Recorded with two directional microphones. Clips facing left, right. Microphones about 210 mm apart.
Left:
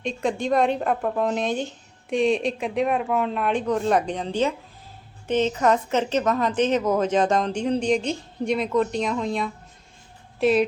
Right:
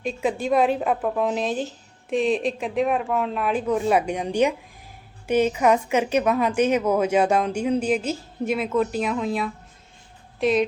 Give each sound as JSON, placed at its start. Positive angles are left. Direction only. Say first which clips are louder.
{"t": 0.0, "sound": "a woman's voice", "louder": "even", "side_deg": -5}